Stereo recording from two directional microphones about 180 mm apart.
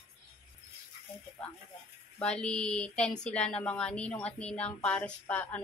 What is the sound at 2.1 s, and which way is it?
Speech, 5° left (ahead or behind).